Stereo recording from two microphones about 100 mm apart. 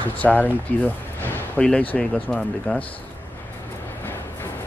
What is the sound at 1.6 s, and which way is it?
Speech, 5° left (ahead or behind).